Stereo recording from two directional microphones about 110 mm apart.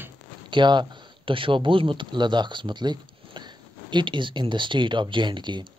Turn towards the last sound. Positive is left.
turn(degrees=-45)  # may be behind; listen again after turning